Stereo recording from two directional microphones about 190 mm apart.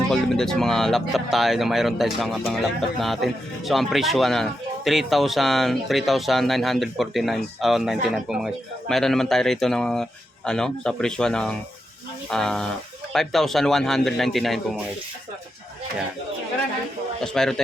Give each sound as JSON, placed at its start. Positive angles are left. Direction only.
{"t": 0.1, "sound": "speech", "side_deg": 0}
{"t": 17.2, "sound": "speech", "side_deg": 5}